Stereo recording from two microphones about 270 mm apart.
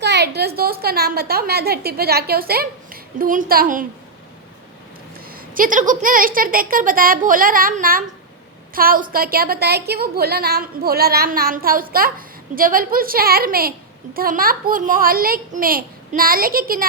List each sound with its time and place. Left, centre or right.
0.0 s a woman's voice: right
5.3 s a woman's voice: right